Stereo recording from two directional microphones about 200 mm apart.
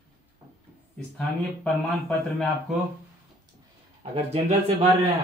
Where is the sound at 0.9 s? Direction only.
5° left (ahead or behind).